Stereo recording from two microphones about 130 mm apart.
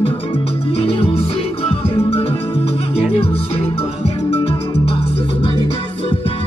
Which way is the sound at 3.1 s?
50° left (ahead or behind).